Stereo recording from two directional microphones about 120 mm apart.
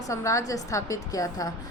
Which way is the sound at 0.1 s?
25° left (ahead or behind).